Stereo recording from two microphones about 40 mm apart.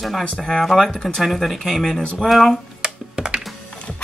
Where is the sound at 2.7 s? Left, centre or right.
Right.